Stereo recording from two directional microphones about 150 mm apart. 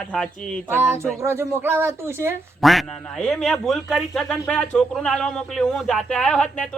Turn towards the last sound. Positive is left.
turn(degrees=5)  # may be behind; listen again after turning